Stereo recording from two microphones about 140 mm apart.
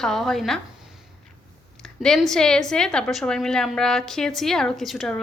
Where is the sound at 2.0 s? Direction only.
5° left (ahead or behind).